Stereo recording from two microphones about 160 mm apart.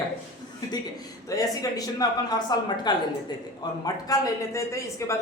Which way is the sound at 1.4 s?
20° left (ahead or behind).